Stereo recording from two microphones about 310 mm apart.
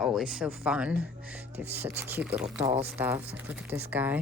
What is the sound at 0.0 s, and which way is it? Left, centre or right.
Speech, centre.